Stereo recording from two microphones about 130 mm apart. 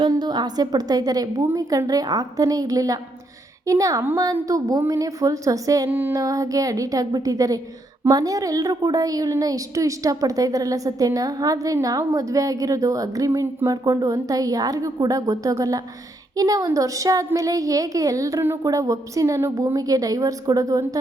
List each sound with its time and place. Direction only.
0.0 s a woman's voice: 35° right (ahead or behind)
5.9 s a sound: 15° right (ahead or behind)
6.1 s a woman's voice: 25° right (ahead or behind)